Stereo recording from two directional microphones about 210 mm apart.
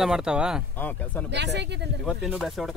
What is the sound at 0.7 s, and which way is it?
Speech, 10° left (ahead or behind).